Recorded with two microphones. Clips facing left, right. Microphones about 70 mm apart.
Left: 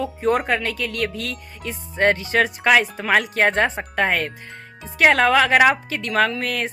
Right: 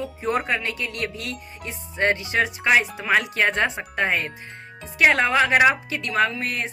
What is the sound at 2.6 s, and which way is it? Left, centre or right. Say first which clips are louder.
Speech: left 2 dB; left.